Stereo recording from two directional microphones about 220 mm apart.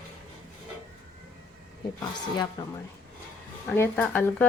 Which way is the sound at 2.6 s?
15° left (ahead or behind).